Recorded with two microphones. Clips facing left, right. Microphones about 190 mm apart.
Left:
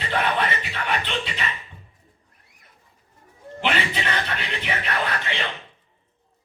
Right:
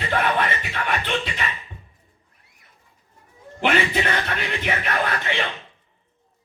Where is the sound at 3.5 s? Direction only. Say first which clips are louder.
Right 4 dB; 50° right (ahead or behind).